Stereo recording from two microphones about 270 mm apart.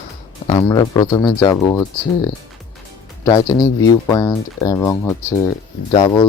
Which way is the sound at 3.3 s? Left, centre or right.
Centre.